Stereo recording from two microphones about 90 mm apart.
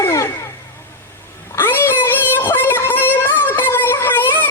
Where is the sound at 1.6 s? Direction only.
25° left (ahead or behind).